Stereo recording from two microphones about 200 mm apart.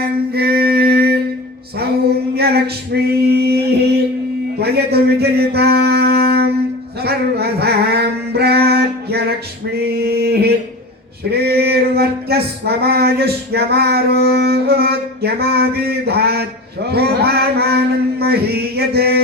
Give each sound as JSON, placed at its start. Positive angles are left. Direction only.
{"t": 0.0, "sound": "mantra", "side_deg": -50}
{"t": 1.8, "sound": "male singing", "side_deg": -50}
{"t": 4.6, "sound": "mantra", "side_deg": -55}
{"t": 7.0, "sound": "a sound", "side_deg": -55}
{"t": 9.7, "sound": "male singing", "side_deg": -50}
{"t": 11.3, "sound": "a sound", "side_deg": -55}